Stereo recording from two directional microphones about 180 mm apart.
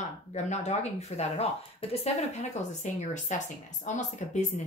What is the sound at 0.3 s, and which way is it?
Speech, 40° left (ahead or behind).